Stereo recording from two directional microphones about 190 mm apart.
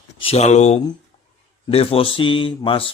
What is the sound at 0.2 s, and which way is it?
Speech, 30° left (ahead or behind).